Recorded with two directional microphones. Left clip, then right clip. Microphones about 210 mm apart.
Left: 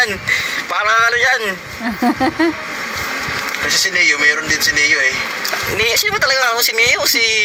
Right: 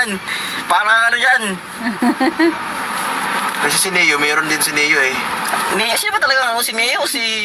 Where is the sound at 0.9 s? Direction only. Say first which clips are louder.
Left 1 dB; 40° left (ahead or behind).